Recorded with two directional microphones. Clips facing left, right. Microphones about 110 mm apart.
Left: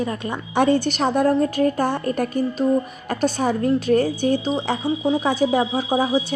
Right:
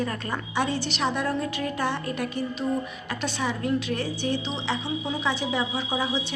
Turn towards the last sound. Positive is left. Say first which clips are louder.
# left 8 dB
turn(degrees=45)  # may be behind; listen again after turning